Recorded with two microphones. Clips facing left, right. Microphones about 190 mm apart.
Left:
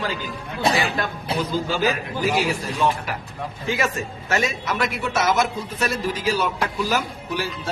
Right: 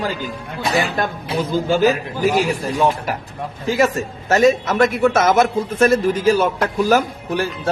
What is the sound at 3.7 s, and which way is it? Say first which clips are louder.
A man's voice: right 11 dB; 40° right (ahead or behind).